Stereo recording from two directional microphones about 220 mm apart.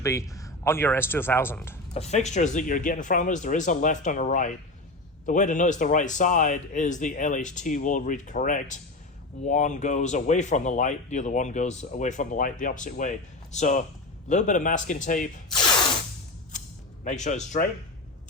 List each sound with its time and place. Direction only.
0.0 s speech: 15° left (ahead or behind)
1.9 s speech: 30° left (ahead or behind)
16.5 s a sound: 35° left (ahead or behind)